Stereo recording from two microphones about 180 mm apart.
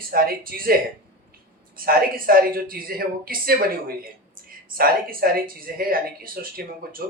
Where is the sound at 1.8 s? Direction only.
55° right (ahead or behind).